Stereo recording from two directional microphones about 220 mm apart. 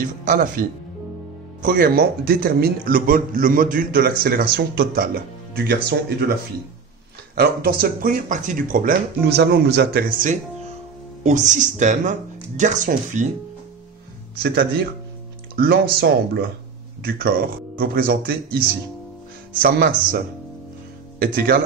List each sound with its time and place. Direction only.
0.0 s a man's voice: 35° right (ahead or behind)
7.3 s a man's voice: 40° right (ahead or behind)
14.4 s speech: 45° right (ahead or behind)
17.7 s a man's voice: 40° right (ahead or behind)
21.2 s speech: 40° right (ahead or behind)